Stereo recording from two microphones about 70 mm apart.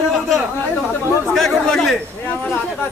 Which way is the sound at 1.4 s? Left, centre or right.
Centre.